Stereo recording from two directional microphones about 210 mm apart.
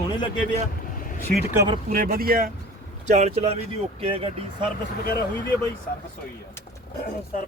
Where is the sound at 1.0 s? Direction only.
35° left (ahead or behind).